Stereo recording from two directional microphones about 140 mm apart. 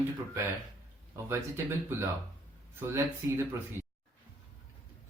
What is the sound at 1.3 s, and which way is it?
Speech, 15° right (ahead or behind).